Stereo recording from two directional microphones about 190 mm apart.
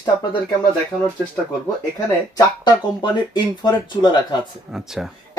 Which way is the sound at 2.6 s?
25° left (ahead or behind).